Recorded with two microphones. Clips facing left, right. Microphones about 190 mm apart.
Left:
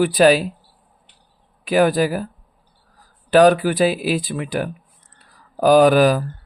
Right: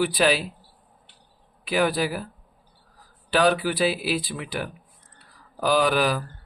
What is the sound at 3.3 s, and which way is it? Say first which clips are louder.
Speech: left 8 dB; 45° left (ahead or behind).